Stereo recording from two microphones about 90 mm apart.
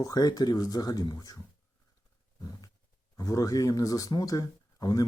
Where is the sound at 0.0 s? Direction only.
45° left (ahead or behind).